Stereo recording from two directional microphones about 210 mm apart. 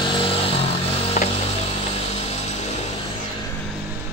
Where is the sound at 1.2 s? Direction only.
35° left (ahead or behind).